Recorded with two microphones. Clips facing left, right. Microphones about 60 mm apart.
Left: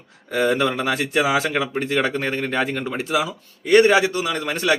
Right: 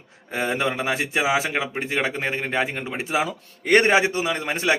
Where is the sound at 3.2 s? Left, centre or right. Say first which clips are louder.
Right 1 dB; right.